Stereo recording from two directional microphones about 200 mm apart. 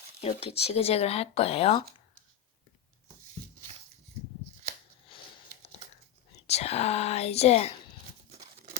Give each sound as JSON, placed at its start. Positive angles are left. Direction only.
{"t": 0.2, "sound": "speech", "side_deg": 30}
{"t": 5.1, "sound": "a sound", "side_deg": 25}
{"t": 6.5, "sound": "speech", "side_deg": 30}